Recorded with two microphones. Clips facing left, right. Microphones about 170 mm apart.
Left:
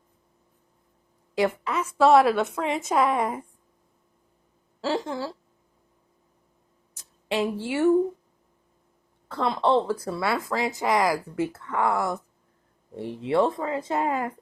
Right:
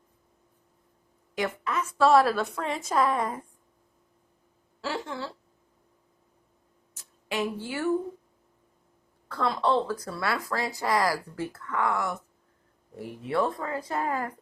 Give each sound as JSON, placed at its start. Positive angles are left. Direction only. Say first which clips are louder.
{"t": 1.4, "sound": "a woman's voice", "louder": "left 5 dB", "side_deg": 30}
{"t": 4.8, "sound": "a woman's voice", "louder": "left 6 dB", "side_deg": 40}
{"t": 6.9, "sound": "speech", "louder": "left 5 dB", "side_deg": 30}
{"t": 9.3, "sound": "speech", "louder": "left 3 dB", "side_deg": 20}